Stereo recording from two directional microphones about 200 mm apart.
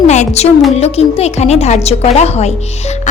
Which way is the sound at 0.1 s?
35° left (ahead or behind).